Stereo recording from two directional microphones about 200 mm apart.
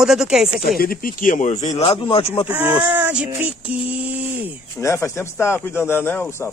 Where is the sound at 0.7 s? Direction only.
45° left (ahead or behind); by 2.5 s 25° left (ahead or behind).